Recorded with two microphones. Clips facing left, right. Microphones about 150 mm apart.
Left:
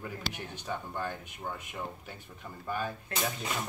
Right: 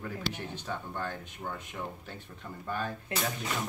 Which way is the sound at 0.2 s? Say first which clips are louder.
Right 3 dB; 15° left (ahead or behind).